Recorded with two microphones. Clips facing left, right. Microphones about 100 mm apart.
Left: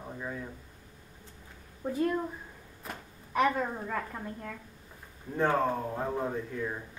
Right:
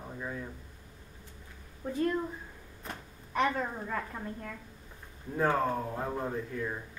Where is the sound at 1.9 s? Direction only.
10° left (ahead or behind).